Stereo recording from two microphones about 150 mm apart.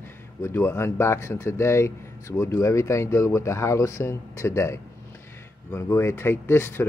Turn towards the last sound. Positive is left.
turn(degrees=15)  # may be behind; listen again after turning